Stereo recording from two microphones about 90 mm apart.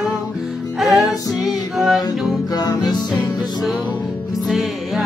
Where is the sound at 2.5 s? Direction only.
45° left (ahead or behind).